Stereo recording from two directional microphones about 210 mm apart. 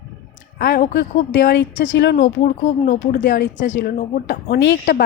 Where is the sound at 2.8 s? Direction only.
40° left (ahead or behind).